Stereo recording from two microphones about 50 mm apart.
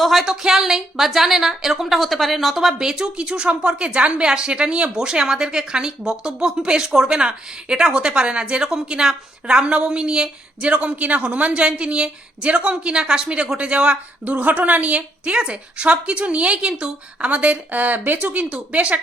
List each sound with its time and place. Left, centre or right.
0.0 s a woman's voice: centre
2.7 s a woman's voice: centre
14.3 s a woman's voice: right
18.3 s a woman's voice: right